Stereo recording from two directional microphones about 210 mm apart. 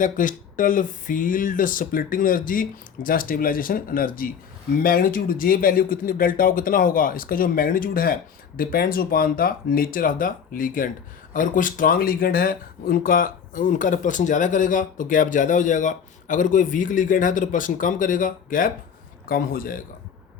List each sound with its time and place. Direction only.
0.0 s speech: 40° left (ahead or behind)